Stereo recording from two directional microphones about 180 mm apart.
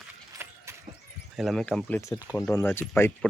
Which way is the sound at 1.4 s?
Centre (ahead or behind).